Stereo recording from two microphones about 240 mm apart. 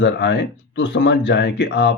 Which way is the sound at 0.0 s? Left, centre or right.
Left.